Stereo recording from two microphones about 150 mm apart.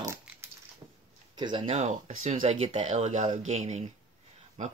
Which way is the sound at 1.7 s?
50° right (ahead or behind).